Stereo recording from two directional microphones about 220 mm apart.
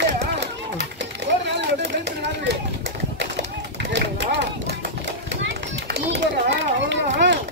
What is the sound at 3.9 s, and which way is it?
Run, 50° right (ahead or behind).